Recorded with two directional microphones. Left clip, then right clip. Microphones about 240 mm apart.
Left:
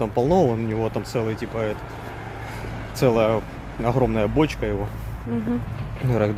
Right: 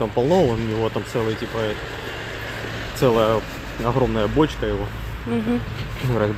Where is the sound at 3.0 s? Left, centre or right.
Centre.